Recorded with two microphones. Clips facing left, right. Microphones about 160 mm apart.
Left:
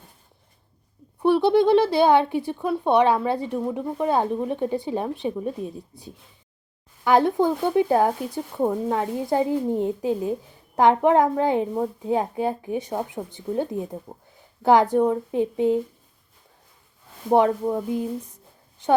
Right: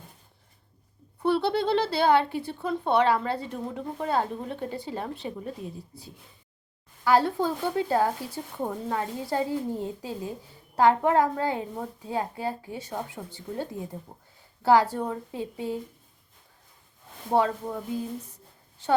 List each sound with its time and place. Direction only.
1.2 s speech: 15° left (ahead or behind)
17.3 s speech: 20° left (ahead or behind)